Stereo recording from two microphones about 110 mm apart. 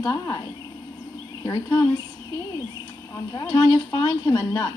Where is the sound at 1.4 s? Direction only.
40° left (ahead or behind).